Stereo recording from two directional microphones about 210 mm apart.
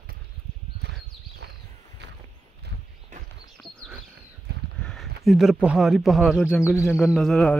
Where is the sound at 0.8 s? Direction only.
55° right (ahead or behind).